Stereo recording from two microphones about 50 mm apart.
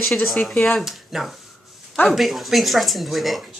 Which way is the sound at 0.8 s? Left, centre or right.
Centre.